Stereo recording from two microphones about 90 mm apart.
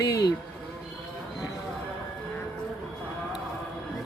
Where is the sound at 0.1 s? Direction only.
45° left (ahead or behind).